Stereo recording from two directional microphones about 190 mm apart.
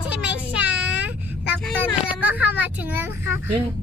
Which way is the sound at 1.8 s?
10° right (ahead or behind).